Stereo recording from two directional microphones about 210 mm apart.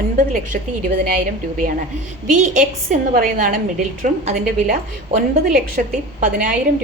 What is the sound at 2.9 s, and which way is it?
A woman's voice, 40° right (ahead or behind).